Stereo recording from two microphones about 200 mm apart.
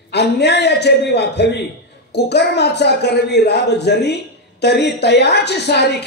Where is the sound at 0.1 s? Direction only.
55° left (ahead or behind).